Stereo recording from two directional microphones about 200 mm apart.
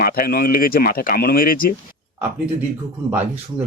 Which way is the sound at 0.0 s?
45° left (ahead or behind).